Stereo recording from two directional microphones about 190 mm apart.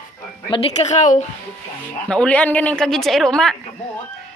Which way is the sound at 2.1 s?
5° left (ahead or behind).